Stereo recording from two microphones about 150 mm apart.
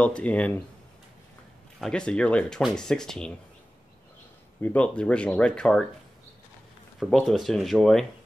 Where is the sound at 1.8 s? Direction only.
5° left (ahead or behind).